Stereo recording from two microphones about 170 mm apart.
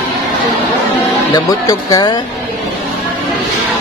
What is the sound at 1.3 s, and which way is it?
Speech, 20° left (ahead or behind).